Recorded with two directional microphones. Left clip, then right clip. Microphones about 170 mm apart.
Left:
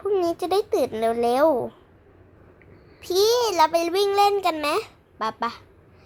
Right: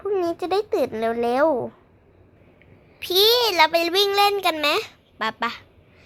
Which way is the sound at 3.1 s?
5° right (ahead or behind).